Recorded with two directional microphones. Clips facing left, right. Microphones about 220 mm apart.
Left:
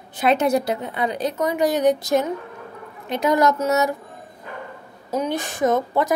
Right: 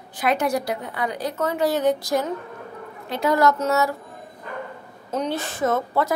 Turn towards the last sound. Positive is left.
turn(degrees=15)  # may be behind; listen again after turning